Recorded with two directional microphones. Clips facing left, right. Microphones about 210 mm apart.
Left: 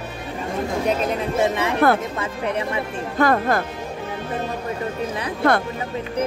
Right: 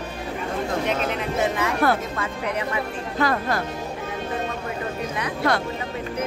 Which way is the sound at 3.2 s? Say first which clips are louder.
Left 5 dB; 50° left (ahead or behind).